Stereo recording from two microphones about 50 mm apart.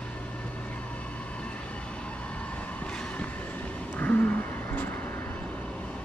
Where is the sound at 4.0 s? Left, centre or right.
Left.